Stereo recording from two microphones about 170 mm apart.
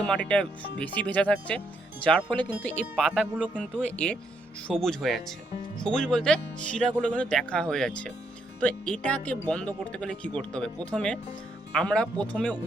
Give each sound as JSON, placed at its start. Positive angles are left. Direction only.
{"t": 0.1, "sound": "speech", "side_deg": 5}
{"t": 2.8, "sound": "speech", "side_deg": -5}
{"t": 3.5, "sound": "speech", "side_deg": 5}